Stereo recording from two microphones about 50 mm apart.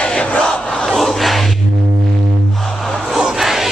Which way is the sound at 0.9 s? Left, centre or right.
Centre.